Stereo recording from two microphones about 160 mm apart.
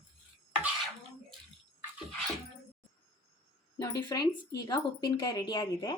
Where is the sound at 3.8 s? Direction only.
25° left (ahead or behind).